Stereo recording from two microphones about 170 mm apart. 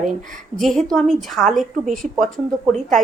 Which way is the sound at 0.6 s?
Centre (ahead or behind).